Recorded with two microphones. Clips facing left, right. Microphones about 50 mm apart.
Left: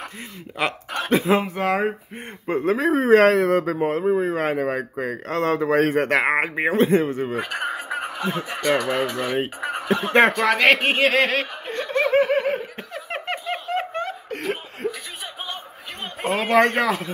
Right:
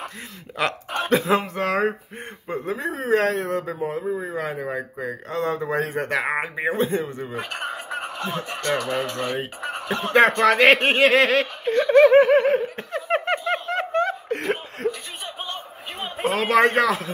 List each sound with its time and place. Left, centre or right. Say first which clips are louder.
1.0 s speech: left 1 dB; centre
2.4 s speech: left 7 dB; left
4.0 s speech: left 6 dB; left
7.4 s a sound: left 3 dB; centre
8.7 s speech: left 2 dB; left
9.6 s chicken: left 2 dB; centre
9.8 s speech: even; centre
12.0 s a sound: right 5 dB; centre
14.3 s laughter: right 2 dB; centre
14.8 s chuckle: right 2 dB; centre
15.4 s a sound: even; centre
16.7 s speech: right 1 dB; centre